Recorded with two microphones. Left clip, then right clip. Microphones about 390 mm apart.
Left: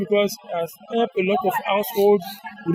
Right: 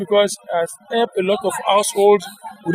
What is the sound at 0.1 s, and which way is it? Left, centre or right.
Speech, right.